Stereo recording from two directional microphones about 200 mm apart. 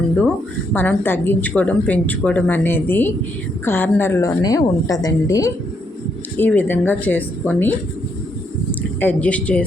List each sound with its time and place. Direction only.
0.7 s a woman's voice: 10° left (ahead or behind)
9.0 s a woman's voice: 10° left (ahead or behind)